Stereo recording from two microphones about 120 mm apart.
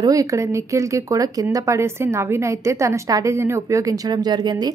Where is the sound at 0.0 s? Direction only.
30° right (ahead or behind).